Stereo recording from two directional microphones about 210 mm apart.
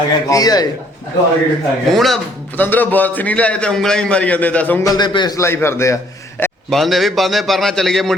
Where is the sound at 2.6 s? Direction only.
10° left (ahead or behind).